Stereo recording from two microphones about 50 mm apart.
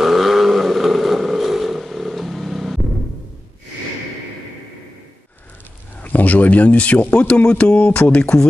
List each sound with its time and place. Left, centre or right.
0.0 s vehicle: centre
6.0 s speech: left